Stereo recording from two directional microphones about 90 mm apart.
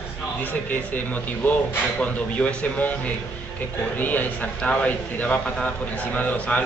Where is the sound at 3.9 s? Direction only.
20° left (ahead or behind).